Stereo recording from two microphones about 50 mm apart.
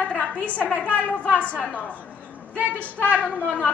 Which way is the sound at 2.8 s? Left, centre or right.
Left.